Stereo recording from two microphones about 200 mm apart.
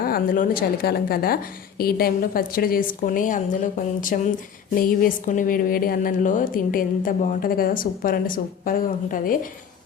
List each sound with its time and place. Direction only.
0.0 s a woman's voice: 45° left (ahead or behind)